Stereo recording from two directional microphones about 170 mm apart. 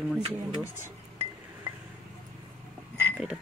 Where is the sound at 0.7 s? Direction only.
15° right (ahead or behind).